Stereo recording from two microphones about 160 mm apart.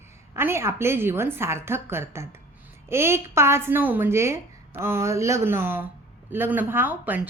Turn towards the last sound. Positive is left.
turn(degrees=-10)  # may be behind; listen again after turning